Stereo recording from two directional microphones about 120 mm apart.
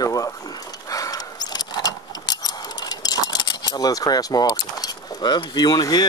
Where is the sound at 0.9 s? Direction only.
30° left (ahead or behind).